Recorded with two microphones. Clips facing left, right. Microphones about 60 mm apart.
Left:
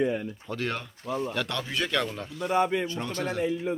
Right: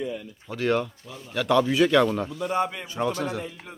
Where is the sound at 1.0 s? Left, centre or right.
Left.